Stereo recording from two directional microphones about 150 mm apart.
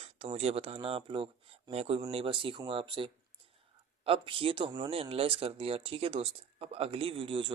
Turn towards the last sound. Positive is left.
turn(degrees=-35)  # may be behind; listen again after turning